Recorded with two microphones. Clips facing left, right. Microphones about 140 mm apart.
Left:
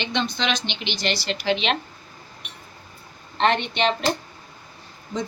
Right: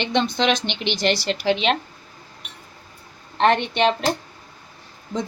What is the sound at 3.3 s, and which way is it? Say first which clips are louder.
Speech: right 3 dB; 50° right (ahead or behind).